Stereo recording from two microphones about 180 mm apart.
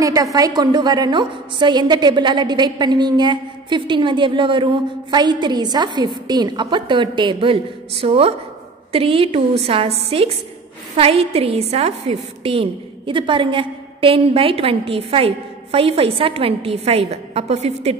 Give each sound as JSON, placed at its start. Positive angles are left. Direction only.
{"t": 0.0, "sound": "a woman's voice", "side_deg": -20}